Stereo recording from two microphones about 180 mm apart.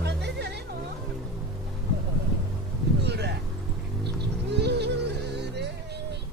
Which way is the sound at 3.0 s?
70° right (ahead or behind).